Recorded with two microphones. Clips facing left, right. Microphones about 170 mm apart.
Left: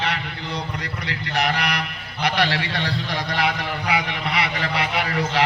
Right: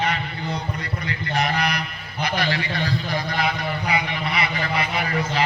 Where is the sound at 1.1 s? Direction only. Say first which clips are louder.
Even; 75° left (ahead or behind).